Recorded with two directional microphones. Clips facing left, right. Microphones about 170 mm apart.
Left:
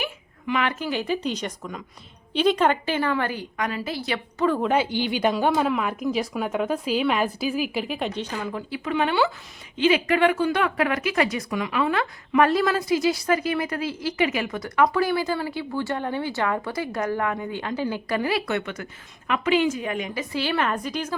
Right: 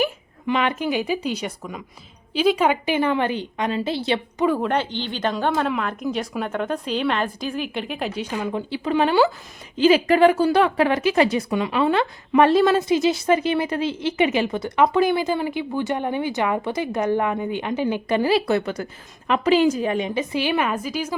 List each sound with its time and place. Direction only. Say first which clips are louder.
0.0 s speech: right 8 dB; 30° right (ahead or behind)
4.6 s a woman's voice: left 1 dB; 5° left (ahead or behind)